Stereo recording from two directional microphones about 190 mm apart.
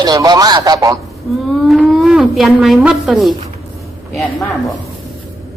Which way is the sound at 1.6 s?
Centre (ahead or behind).